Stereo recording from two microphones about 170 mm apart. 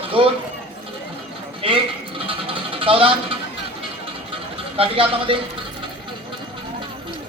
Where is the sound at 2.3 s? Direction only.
30° right (ahead or behind).